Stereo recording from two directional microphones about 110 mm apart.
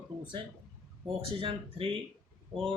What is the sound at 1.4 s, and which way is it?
Speech, 55° right (ahead or behind).